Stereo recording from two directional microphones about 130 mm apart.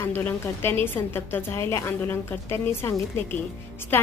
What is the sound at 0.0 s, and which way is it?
A woman's voice, 15° left (ahead or behind).